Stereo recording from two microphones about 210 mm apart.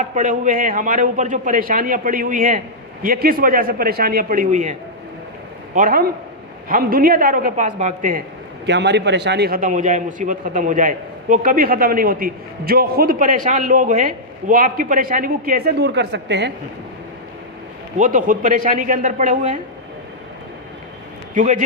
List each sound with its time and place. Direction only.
0.0 s a man's voice: 35° right (ahead or behind)
8.6 s a man's voice: 55° right (ahead or behind)
17.9 s a man's voice: 40° right (ahead or behind)
21.3 s a man's voice: 35° right (ahead or behind)